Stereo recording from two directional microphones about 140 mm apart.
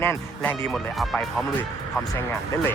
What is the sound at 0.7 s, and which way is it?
Speech, 5° left (ahead or behind).